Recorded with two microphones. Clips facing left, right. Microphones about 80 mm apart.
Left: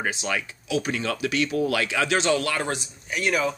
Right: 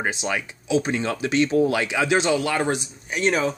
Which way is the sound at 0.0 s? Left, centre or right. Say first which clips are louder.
Right 2 dB; right.